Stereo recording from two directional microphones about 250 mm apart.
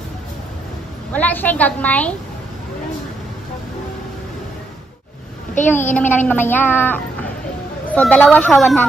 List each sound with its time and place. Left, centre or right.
1.1 s a woman's voice: centre
5.6 s a child's voice: left
5.9 s a woman's voice: centre